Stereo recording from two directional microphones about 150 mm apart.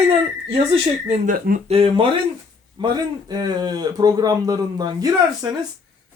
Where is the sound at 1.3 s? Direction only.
70° right (ahead or behind).